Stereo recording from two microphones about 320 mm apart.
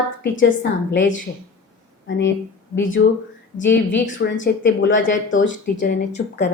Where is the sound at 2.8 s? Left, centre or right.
Left.